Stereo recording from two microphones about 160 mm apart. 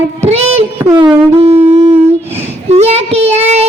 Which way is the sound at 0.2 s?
40° right (ahead or behind).